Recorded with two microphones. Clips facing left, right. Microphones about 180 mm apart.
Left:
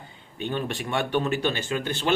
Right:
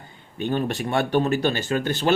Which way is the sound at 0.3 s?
40° right (ahead or behind).